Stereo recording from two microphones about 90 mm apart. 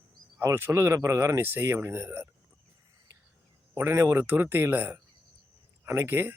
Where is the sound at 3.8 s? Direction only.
30° right (ahead or behind).